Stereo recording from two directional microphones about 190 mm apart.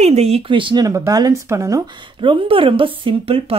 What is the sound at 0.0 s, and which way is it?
Speech, 35° right (ahead or behind).